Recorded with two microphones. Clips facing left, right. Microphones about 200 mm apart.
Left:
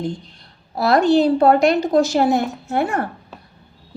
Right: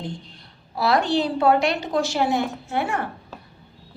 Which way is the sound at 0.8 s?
45° left (ahead or behind).